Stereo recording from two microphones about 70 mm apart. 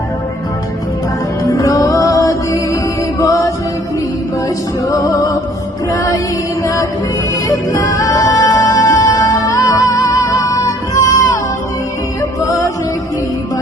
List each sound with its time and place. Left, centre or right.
1.5 s music: left
3.2 s mantra: left
4.9 s music: left
7.4 s music: left
12.5 s music: left